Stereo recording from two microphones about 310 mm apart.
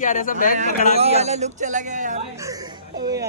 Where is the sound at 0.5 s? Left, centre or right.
Right.